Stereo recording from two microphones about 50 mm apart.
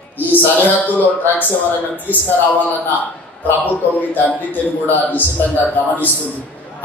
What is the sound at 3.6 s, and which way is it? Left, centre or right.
A man's voice, left.